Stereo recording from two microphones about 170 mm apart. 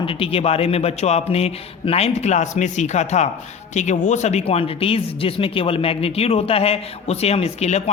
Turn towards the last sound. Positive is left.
turn(degrees=40)  # may be behind; listen again after turning